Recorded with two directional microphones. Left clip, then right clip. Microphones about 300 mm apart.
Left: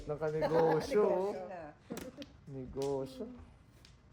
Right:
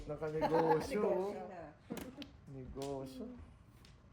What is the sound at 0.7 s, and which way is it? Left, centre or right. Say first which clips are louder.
Speech: left 5 dB; left.